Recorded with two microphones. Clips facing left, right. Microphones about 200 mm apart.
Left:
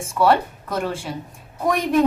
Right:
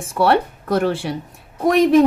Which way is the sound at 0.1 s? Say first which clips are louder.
Right 1 dB; 70° right (ahead or behind).